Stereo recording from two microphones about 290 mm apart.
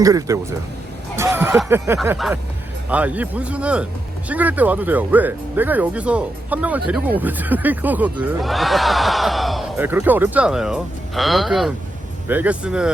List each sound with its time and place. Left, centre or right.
0.0 s speech: centre